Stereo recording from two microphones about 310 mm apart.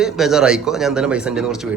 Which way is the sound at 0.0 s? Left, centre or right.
Centre.